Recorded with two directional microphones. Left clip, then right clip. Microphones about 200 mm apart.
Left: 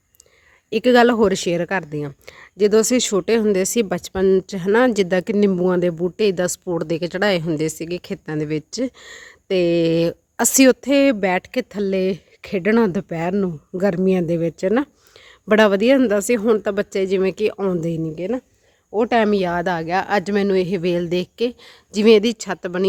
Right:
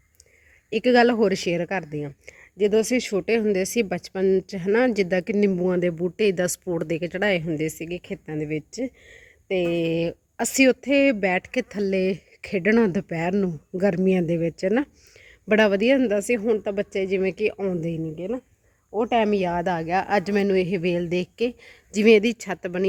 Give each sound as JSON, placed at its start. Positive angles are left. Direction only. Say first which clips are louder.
{"t": 0.7, "sound": "speech", "louder": "left 4 dB", "side_deg": 15}
{"t": 9.7, "sound": "speech", "louder": "left 7 dB", "side_deg": 90}
{"t": 10.1, "sound": "speech", "louder": "left 7 dB", "side_deg": 20}